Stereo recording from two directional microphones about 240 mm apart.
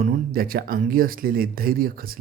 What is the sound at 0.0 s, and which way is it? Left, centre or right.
Speech, right.